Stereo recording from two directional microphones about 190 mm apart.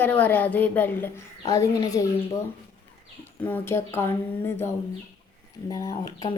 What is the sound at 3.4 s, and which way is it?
Speech, 10° left (ahead or behind).